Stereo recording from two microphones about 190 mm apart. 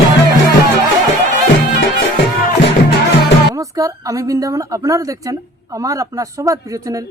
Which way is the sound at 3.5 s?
15° right (ahead or behind).